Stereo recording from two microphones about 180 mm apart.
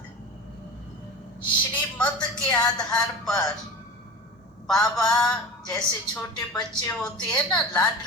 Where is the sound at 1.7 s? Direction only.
10° left (ahead or behind).